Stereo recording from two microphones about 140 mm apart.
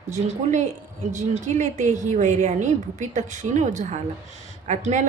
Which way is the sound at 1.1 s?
60° right (ahead or behind).